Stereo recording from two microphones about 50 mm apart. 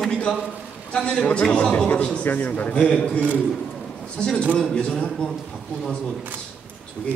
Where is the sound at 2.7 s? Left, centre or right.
Centre.